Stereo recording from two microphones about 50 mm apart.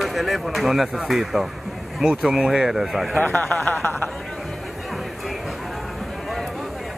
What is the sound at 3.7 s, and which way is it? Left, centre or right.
Speech, left.